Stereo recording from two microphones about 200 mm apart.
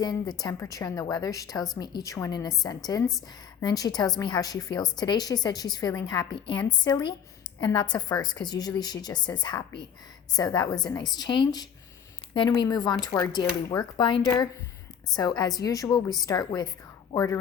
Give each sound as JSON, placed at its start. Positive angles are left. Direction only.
{"t": 0.0, "sound": "a woman's voice", "side_deg": 20}